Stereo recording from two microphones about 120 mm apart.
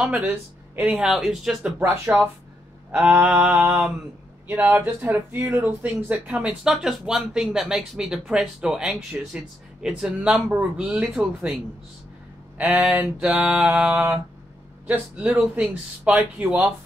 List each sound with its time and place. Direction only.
0.2 s speech: 15° right (ahead or behind)
2.9 s a sound: 5° right (ahead or behind)
3.2 s speech: 10° right (ahead or behind)
4.5 s speech: 15° right (ahead or behind)
12.5 s speech: 10° right (ahead or behind)